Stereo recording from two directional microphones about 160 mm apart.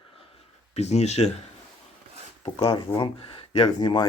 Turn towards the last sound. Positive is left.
turn(degrees=25)  # may be behind; listen again after turning